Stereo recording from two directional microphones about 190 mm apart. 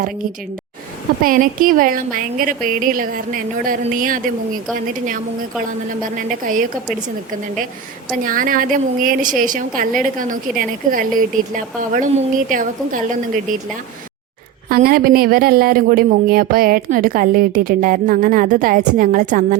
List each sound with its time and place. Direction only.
1.2 s speech: 50° right (ahead or behind)
8.2 s speech: 45° right (ahead or behind)
14.7 s speech: 50° right (ahead or behind)